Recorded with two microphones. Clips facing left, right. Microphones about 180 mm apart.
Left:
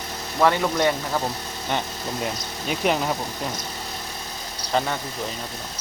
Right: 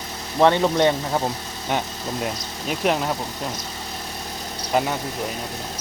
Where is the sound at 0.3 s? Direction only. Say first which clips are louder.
Right 3 dB; 25° right (ahead or behind).